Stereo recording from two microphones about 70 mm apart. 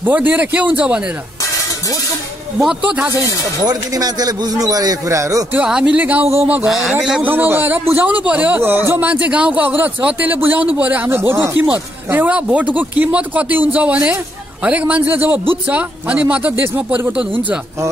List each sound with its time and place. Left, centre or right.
0.0 s a man's voice: right
2.8 s a man's voice: centre
3.6 s speech: right
5.7 s a man's voice: centre
5.9 s a man's voice: right
6.7 s a man's voice: centre
7.2 s a man's voice: right
11.1 s speech: right
12.3 s a man's voice: centre
16.6 s speech: right
17.2 s a man's voice: right